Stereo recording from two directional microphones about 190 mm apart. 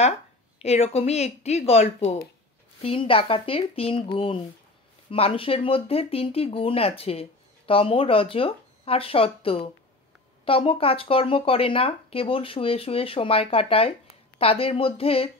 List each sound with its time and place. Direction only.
0.6 s speech: 35° left (ahead or behind)